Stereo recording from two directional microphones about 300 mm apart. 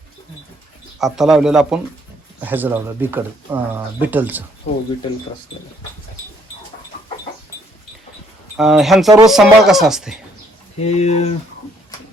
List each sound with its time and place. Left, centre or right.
0.9 s a man's voice: centre
4.7 s speech: left
8.5 s a man's voice: centre
10.8 s speech: left